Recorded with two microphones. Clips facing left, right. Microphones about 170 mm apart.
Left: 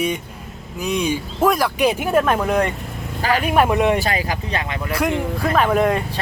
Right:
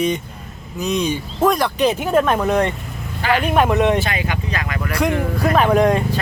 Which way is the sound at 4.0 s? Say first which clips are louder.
Left 1 dB; 35° left (ahead or behind).